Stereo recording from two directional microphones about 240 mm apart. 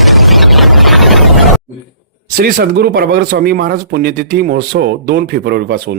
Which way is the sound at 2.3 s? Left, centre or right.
Right.